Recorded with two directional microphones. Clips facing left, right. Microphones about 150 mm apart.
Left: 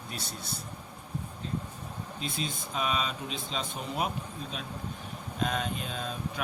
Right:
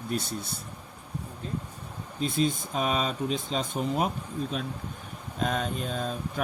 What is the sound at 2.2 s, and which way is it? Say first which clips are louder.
Speech: right 10 dB; 50° right (ahead or behind).